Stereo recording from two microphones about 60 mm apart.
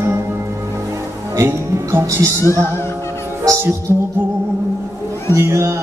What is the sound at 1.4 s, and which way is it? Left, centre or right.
Music, right.